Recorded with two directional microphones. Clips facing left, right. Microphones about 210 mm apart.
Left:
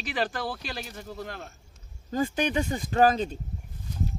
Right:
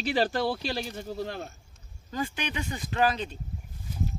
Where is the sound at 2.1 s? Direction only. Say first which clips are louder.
Left 6 dB; 45° left (ahead or behind).